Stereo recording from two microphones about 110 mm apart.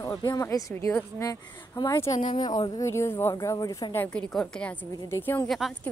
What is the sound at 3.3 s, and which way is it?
Speech, 35° left (ahead or behind).